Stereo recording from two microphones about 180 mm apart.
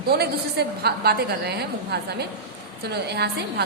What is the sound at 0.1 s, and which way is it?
A woman's voice, 60° right (ahead or behind).